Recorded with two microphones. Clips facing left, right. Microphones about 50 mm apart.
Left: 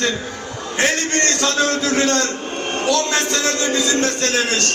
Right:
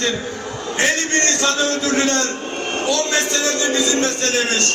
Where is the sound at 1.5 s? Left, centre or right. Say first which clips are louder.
Left 1 dB; left.